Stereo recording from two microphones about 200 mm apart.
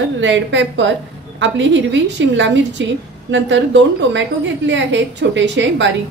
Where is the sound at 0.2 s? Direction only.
65° right (ahead or behind).